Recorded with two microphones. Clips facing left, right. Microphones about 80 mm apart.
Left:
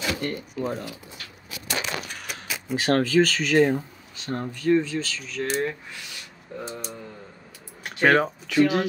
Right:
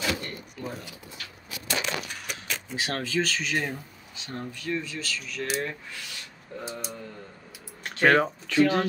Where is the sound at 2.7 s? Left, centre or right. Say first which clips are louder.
Left 10 dB; left.